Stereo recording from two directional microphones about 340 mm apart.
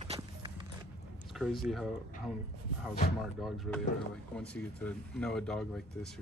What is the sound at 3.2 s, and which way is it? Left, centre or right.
Speech, centre.